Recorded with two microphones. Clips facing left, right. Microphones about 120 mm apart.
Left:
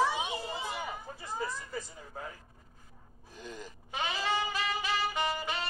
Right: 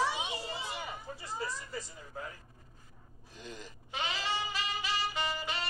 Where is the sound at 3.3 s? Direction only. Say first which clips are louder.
Left 2 dB; 50° left (ahead or behind).